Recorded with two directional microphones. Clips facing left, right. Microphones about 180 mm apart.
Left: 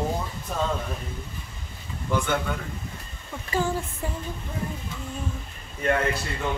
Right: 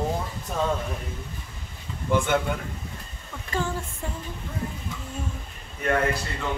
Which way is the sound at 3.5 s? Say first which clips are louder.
Left 2 dB; 5° left (ahead or behind).